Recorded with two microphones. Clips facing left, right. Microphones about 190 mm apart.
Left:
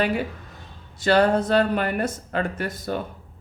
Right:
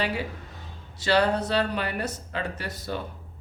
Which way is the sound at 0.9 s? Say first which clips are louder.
Left 4 dB; 50° left (ahead or behind).